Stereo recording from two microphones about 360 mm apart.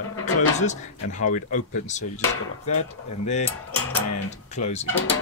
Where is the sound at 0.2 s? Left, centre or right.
Centre.